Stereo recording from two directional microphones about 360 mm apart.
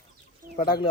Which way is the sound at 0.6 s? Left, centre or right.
Centre.